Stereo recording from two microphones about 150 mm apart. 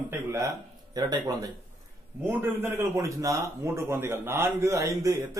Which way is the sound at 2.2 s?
15° right (ahead or behind).